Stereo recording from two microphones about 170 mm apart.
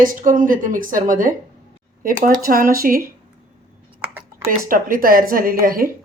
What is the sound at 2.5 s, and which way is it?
Speech, 55° right (ahead or behind).